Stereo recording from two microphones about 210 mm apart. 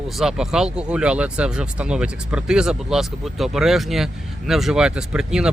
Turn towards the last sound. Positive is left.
turn(degrees=-5)  # may be behind; listen again after turning